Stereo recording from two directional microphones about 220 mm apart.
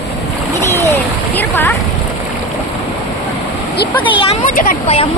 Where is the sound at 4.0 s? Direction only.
25° left (ahead or behind).